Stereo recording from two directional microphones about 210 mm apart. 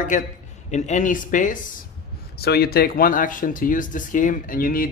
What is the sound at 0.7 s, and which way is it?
Speech, 35° left (ahead or behind).